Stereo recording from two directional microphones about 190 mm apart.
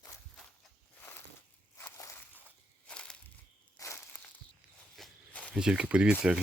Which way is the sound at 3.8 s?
15° left (ahead or behind).